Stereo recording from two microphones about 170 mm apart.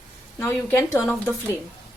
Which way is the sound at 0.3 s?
15° left (ahead or behind).